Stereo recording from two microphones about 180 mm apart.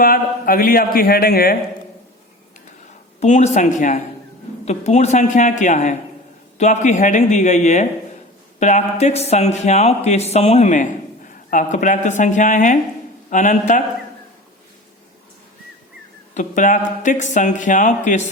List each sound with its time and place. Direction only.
0.0 s speech: 50° left (ahead or behind)
3.2 s speech: 40° left (ahead or behind)
16.3 s speech: 45° left (ahead or behind)